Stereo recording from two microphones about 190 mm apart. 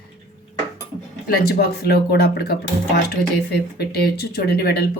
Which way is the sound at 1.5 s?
55° left (ahead or behind).